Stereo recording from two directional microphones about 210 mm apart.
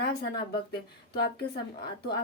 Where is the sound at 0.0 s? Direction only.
50° left (ahead or behind).